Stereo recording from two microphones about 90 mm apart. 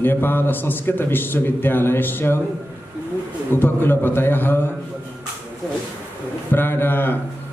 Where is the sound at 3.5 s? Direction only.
25° left (ahead or behind).